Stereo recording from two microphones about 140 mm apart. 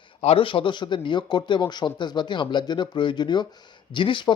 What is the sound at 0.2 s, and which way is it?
Speech, 40° left (ahead or behind).